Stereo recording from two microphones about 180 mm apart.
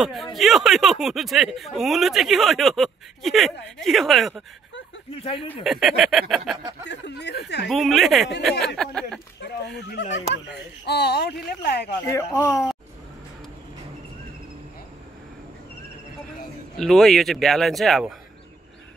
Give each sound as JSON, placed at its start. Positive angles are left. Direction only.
{"t": 0.0, "sound": "speech", "side_deg": 0}
{"t": 5.1, "sound": "speech", "side_deg": 30}
{"t": 5.6, "sound": "speech", "side_deg": 0}
{"t": 6.9, "sound": "speech", "side_deg": 70}
{"t": 7.6, "sound": "speech", "side_deg": 0}
{"t": 10.3, "sound": "speech", "side_deg": 70}
{"t": 12.1, "sound": "speech", "side_deg": 15}
{"t": 16.7, "sound": "speech", "side_deg": 0}